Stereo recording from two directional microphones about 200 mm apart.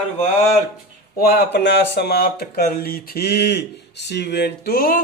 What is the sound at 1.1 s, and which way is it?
Speech, 50° left (ahead or behind).